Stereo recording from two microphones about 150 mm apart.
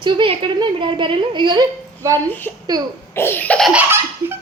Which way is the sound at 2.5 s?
10° left (ahead or behind).